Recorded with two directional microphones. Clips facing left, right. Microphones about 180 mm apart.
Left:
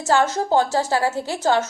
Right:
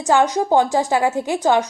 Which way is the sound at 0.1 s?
15° right (ahead or behind).